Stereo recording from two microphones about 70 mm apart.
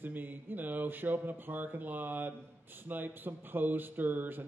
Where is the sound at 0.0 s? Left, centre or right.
Right.